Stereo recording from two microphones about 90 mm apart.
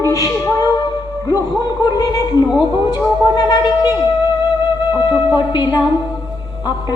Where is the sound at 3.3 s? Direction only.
55° left (ahead or behind).